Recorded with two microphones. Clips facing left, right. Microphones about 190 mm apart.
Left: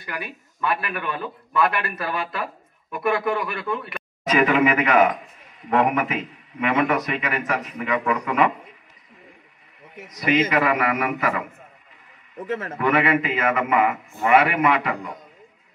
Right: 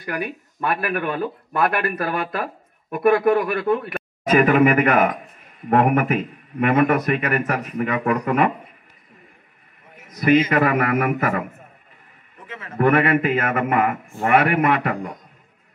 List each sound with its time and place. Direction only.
0.0 s speech: 50° right (ahead or behind)
10.0 s a man's voice: 50° right (ahead or behind)
12.4 s a man's voice: 45° left (ahead or behind)
12.7 s speech: 50° right (ahead or behind)